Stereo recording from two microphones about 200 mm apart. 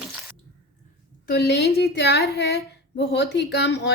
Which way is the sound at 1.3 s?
55° left (ahead or behind).